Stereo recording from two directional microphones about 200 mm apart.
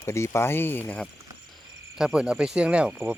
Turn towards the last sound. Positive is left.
turn(degrees=-5)  # may be behind; listen again after turning